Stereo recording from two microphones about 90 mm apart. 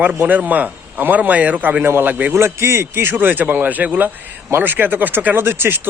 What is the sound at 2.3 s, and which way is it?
A man's voice, 30° right (ahead or behind).